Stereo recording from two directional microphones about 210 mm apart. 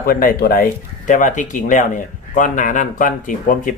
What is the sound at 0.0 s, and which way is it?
Speech, 45° left (ahead or behind).